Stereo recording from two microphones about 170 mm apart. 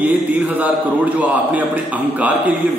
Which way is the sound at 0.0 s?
10° right (ahead or behind).